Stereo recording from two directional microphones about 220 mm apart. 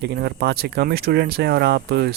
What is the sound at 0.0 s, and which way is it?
Speech, 50° right (ahead or behind).